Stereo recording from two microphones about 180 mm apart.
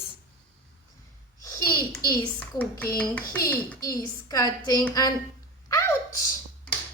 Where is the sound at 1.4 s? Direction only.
20° left (ahead or behind).